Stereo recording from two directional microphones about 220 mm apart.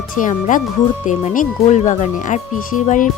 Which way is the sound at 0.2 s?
35° left (ahead or behind).